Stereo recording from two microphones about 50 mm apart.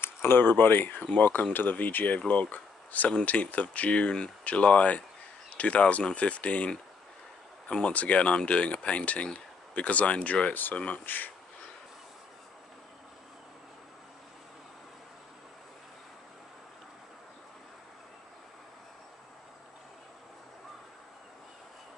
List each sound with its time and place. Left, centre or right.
0.0 s speech: left